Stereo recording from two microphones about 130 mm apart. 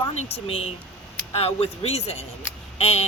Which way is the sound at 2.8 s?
50° left (ahead or behind).